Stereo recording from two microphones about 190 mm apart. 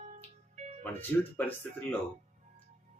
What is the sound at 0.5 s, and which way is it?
Music, 35° right (ahead or behind).